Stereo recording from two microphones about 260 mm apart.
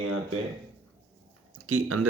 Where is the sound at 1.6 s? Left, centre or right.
Right.